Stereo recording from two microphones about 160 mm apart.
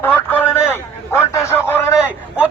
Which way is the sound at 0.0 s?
10° left (ahead or behind).